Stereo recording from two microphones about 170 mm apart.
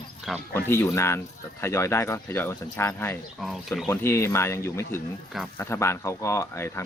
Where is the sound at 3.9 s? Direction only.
15° left (ahead or behind).